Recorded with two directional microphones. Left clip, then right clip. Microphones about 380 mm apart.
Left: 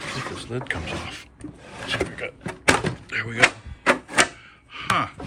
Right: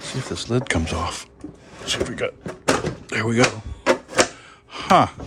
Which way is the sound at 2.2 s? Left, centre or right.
Right.